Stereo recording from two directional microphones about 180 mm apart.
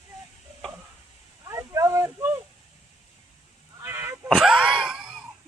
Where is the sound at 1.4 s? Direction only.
15° right (ahead or behind).